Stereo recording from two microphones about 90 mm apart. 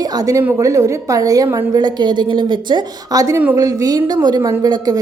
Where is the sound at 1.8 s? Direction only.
55° right (ahead or behind).